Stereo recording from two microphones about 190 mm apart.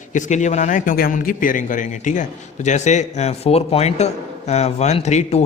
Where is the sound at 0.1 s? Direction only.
40° left (ahead or behind).